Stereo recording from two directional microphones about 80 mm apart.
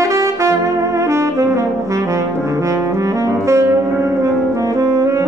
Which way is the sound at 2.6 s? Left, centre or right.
Right.